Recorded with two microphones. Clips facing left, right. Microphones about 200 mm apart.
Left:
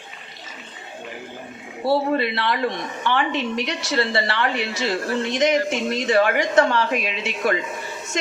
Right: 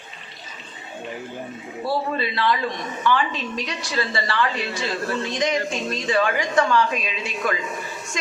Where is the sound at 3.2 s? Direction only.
70° left (ahead or behind).